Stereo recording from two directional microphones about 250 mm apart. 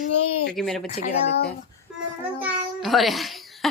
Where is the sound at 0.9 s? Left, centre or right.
Left.